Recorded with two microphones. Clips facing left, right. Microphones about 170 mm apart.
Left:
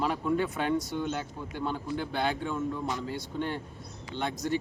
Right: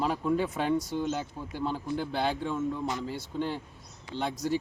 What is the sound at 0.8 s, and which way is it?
Speech, 35° right (ahead or behind).